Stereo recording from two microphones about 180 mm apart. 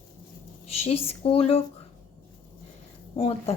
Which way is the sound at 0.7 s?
35° left (ahead or behind).